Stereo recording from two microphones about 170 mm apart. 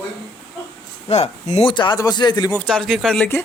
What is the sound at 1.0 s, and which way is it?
Speech, 40° left (ahead or behind).